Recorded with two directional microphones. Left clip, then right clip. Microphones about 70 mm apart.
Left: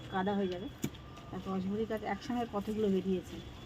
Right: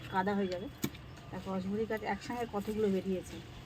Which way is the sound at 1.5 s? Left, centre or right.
Centre.